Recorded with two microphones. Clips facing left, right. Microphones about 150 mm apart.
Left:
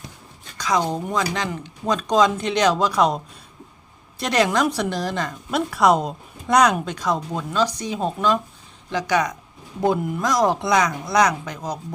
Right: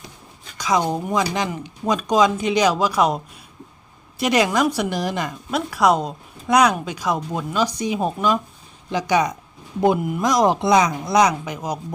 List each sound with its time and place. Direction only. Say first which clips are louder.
0.5 s speech: right 1 dB; 10° right (ahead or behind)
4.2 s speech: right 1 dB; 10° right (ahead or behind)
5.5 s speech: even; centre (ahead or behind)